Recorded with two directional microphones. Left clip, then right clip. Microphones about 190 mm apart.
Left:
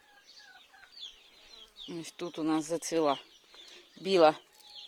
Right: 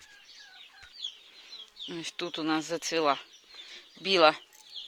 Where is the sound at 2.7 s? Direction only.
20° left (ahead or behind).